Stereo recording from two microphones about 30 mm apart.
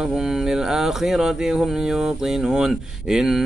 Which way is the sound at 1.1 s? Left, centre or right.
Centre.